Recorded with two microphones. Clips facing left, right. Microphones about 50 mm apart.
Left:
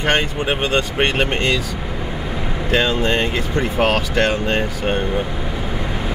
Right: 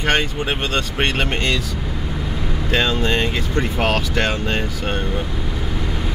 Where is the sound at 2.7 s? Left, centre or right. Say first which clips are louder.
Left 2 dB; centre.